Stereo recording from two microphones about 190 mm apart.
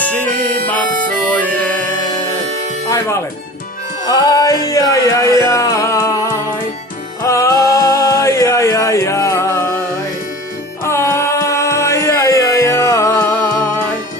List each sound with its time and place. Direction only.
4.1 s music: 20° left (ahead or behind)
7.3 s music: 15° left (ahead or behind)
10.8 s a sound: 15° left (ahead or behind)